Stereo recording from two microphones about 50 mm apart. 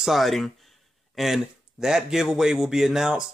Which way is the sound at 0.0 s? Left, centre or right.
Centre.